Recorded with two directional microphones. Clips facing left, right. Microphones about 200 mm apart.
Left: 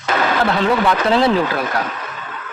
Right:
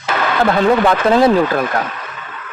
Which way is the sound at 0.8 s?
45° right (ahead or behind).